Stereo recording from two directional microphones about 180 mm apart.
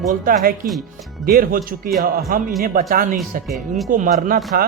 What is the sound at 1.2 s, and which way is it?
A man's voice, 50° right (ahead or behind).